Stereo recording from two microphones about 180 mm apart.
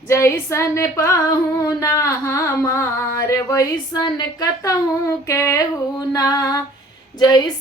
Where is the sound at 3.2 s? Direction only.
15° left (ahead or behind).